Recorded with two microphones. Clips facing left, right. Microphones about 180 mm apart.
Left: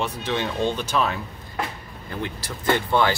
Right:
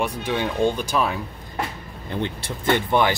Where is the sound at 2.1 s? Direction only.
25° right (ahead or behind).